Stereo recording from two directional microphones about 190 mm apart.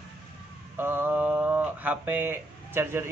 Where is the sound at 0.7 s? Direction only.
10° right (ahead or behind).